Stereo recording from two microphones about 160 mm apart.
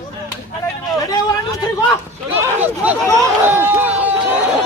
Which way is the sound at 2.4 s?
15° right (ahead or behind).